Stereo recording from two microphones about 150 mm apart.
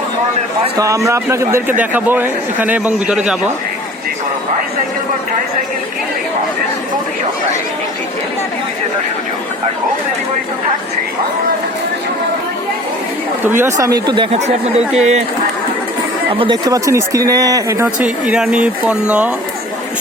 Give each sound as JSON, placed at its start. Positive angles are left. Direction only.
{"t": 0.8, "sound": "a man's voice", "side_deg": -20}
{"t": 13.4, "sound": "speech", "side_deg": -15}
{"t": 14.3, "sound": "speech", "side_deg": -45}
{"t": 16.4, "sound": "speech", "side_deg": -25}
{"t": 17.8, "sound": "a man's voice", "side_deg": -5}